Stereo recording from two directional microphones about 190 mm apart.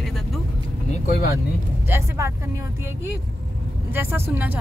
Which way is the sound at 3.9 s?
10° right (ahead or behind).